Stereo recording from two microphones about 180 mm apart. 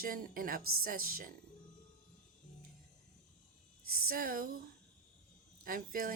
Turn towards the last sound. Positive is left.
turn(degrees=-50)  # may be behind; listen again after turning